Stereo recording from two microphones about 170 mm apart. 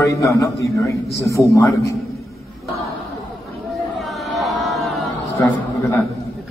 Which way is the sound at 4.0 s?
Centre (ahead or behind).